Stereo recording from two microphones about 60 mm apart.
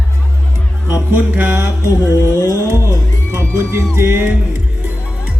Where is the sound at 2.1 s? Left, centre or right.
Left.